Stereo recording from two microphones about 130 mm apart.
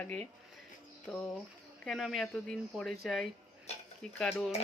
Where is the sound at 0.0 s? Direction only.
10° left (ahead or behind).